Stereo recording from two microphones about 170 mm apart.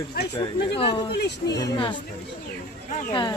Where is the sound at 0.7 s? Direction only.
30° left (ahead or behind).